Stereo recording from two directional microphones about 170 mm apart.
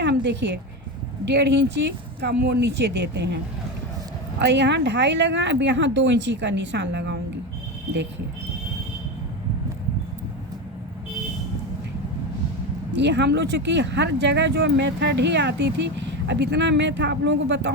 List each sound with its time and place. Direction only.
0.0 s a sound: 90° right
1.2 s speech: 90° right
2.2 s speech: 75° right (ahead or behind)
4.4 s speech: 90° right
12.9 s speech: 90° right